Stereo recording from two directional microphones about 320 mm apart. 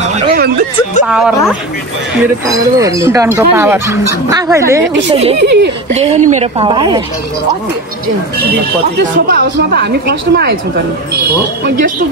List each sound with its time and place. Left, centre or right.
0.0 s a sound: right
1.0 s a woman's voice: centre
5.4 s a woman's voice: right
5.9 s a woman's voice: right
9.3 s a woman's voice: right